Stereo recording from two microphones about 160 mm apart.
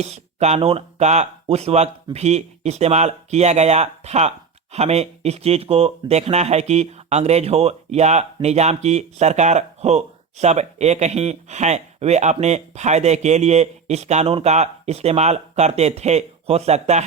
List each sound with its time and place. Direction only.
0.0 s speech: 45° right (ahead or behind)